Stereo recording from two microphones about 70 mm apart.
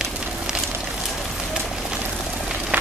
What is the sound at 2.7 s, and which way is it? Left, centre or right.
Vehicle, right.